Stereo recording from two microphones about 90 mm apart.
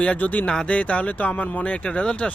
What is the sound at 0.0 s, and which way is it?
A man's voice, 15° left (ahead or behind).